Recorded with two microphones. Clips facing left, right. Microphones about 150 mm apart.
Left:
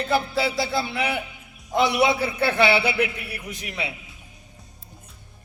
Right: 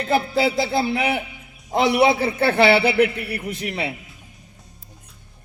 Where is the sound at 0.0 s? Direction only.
55° right (ahead or behind).